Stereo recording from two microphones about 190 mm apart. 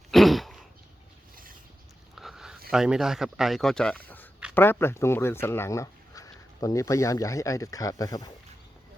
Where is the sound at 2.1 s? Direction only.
Centre (ahead or behind).